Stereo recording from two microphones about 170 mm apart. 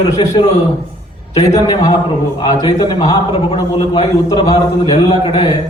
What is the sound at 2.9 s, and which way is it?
A man's voice, 35° left (ahead or behind).